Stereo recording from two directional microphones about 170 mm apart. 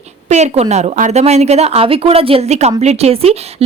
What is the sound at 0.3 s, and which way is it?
Speech, 40° right (ahead or behind).